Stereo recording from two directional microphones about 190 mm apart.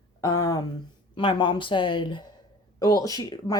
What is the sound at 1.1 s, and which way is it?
Speech, 25° left (ahead or behind).